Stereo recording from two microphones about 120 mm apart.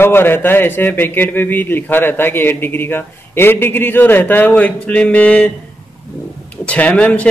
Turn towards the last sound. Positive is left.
turn(degrees=10)  # may be behind; listen again after turning